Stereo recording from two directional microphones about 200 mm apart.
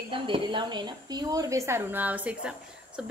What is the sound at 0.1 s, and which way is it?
Speech, 25° right (ahead or behind).